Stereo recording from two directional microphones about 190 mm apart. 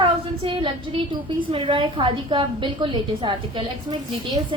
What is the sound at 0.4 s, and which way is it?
A woman's voice, 25° right (ahead or behind).